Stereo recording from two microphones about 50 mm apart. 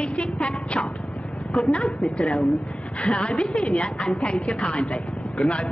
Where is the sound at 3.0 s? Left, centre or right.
Centre.